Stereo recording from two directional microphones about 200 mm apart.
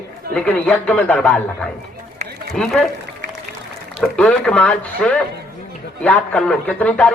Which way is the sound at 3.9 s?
5° left (ahead or behind).